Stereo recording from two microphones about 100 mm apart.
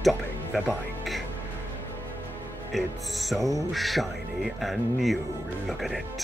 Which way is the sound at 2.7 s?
Centre (ahead or behind).